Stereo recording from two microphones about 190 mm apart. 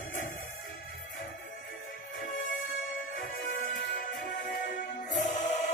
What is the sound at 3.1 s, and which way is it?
Music, 45° left (ahead or behind).